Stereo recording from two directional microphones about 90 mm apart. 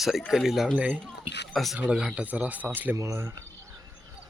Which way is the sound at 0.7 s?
15° right (ahead or behind).